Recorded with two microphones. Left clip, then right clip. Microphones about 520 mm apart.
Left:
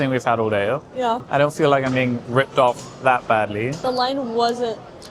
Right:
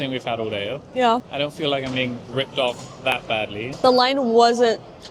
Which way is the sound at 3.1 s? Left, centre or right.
Left.